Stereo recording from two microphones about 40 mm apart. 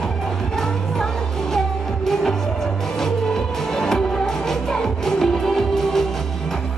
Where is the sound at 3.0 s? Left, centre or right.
Centre.